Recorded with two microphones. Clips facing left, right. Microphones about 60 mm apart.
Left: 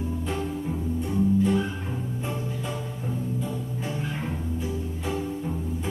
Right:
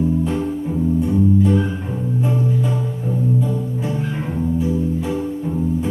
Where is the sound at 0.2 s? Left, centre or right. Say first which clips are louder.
Right 8 dB; centre.